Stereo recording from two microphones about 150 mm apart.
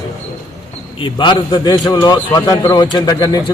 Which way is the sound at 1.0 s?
30° left (ahead or behind).